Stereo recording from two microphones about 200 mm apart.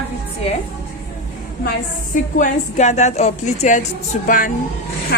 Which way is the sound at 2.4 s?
35° left (ahead or behind).